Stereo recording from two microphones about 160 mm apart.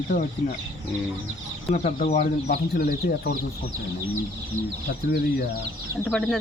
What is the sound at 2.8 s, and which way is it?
Speech, 70° left (ahead or behind).